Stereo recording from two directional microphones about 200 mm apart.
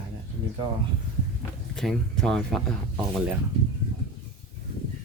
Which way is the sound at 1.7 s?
Centre (ahead or behind).